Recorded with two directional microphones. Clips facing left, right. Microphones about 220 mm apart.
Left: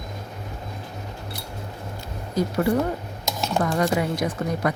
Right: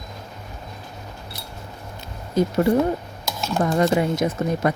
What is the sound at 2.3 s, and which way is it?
Speech, 25° right (ahead or behind).